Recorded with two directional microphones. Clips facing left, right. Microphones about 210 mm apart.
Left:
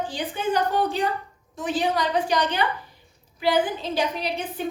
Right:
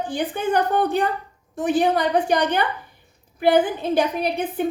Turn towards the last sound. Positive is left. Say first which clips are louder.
# right 6 dB
turn(degrees=-55)  # may be behind; listen again after turning